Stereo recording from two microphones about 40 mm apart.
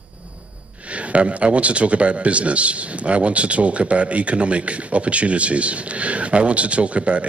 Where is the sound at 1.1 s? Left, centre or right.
Right.